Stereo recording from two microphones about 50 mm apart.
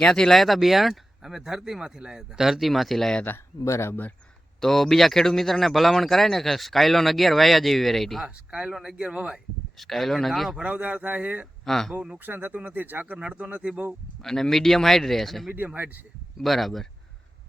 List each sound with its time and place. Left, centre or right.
0.0 s a man's voice: centre
3.6 s speech: left
3.8 s speech: left
4.6 s a man's voice: centre
8.4 s a man's voice: centre
9.7 s a man's voice: centre
10.6 s speech: right
11.6 s speech: centre
12.2 s speech: right
13.1 s speech: right
14.3 s speech: centre
15.5 s speech: right
16.4 s a man's voice: centre